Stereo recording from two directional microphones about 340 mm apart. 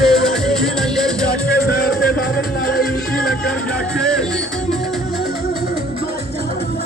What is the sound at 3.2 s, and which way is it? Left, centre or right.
Music, centre.